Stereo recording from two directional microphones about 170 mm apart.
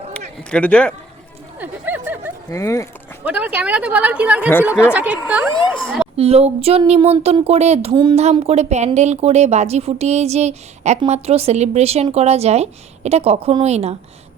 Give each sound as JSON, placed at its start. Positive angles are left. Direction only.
{"t": 0.5, "sound": "speech", "side_deg": 5}
{"t": 1.5, "sound": "a sound", "side_deg": -10}
{"t": 2.5, "sound": "speech", "side_deg": 20}
{"t": 3.2, "sound": "speech", "side_deg": -10}
{"t": 6.1, "sound": "speech", "side_deg": -35}